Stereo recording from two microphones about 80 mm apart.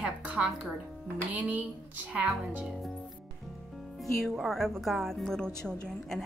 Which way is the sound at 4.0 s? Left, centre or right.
Centre.